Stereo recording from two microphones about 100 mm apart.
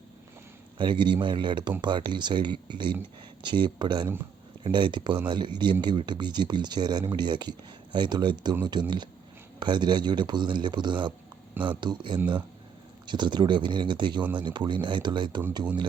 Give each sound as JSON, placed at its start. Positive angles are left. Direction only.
{"t": 0.8, "sound": "speech", "side_deg": -50}